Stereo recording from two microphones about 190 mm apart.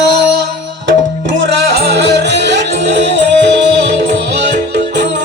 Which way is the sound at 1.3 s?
65° right (ahead or behind).